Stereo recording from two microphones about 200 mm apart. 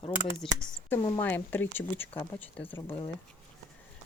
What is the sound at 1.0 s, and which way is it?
Speech, 25° left (ahead or behind).